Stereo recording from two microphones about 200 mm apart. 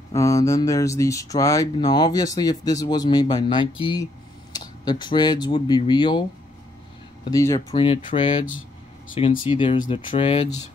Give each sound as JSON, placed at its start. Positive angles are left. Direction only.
{"t": 0.1, "sound": "speech", "side_deg": 15}
{"t": 7.2, "sound": "speech", "side_deg": 15}